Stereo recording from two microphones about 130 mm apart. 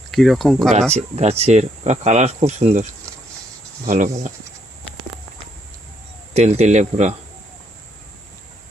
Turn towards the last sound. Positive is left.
turn(degrees=-65)  # may be behind; listen again after turning